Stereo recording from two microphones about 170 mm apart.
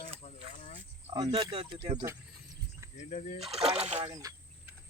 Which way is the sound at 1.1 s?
30° right (ahead or behind).